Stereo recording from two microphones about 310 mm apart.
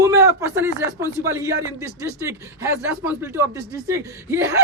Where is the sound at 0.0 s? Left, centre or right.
Centre.